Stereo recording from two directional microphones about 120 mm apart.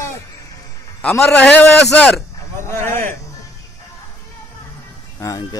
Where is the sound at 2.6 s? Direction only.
20° left (ahead or behind).